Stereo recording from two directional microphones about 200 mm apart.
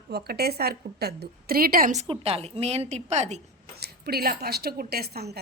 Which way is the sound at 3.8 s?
50° right (ahead or behind).